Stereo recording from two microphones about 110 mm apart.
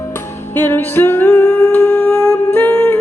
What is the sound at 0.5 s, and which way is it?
Music, 20° left (ahead or behind).